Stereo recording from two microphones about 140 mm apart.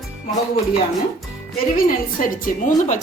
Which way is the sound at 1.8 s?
85° left.